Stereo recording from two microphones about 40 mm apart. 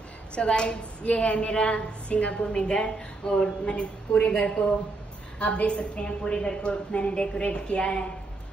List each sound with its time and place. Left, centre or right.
0.3 s a woman's voice: left